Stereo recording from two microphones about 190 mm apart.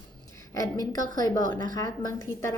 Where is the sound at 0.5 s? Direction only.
20° left (ahead or behind).